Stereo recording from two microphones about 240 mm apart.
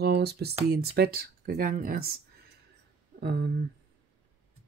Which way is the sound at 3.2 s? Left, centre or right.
Right.